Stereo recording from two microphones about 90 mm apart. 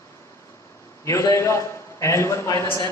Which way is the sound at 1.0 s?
35° left (ahead or behind).